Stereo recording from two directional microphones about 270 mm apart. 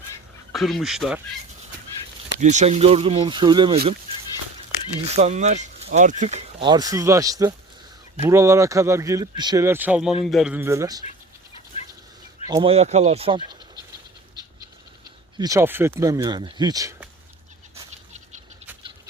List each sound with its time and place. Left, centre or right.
0.5 s speech: centre
2.4 s speech: right
5.1 s speech: right
12.5 s speech: centre
15.4 s speech: centre
17.7 s bird: right